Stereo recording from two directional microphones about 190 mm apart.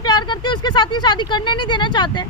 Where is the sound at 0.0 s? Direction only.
25° left (ahead or behind).